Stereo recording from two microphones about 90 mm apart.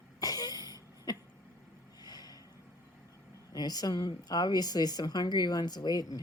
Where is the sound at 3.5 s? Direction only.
45° left (ahead or behind).